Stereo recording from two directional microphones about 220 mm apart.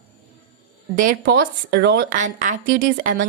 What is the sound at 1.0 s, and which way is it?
A woman's voice, 45° right (ahead or behind).